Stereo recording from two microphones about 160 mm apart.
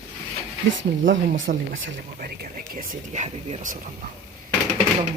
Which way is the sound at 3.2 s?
45° right (ahead or behind).